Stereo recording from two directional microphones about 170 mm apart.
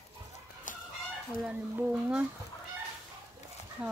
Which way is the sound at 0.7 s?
50° left (ahead or behind).